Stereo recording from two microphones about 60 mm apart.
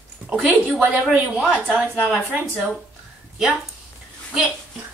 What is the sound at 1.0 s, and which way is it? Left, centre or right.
Speech, centre.